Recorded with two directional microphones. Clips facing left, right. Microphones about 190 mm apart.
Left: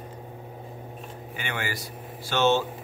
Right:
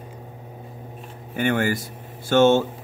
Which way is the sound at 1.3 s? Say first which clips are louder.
Right 12 dB; 50° right (ahead or behind).